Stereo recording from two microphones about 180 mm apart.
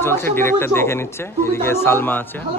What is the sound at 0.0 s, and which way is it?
Speech, 15° left (ahead or behind).